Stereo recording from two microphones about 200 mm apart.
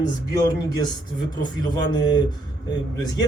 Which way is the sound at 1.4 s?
20° left (ahead or behind).